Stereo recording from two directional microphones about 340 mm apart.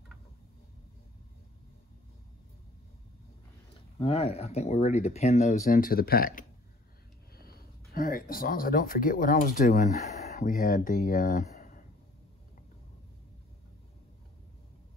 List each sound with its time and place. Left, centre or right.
4.0 s speech: centre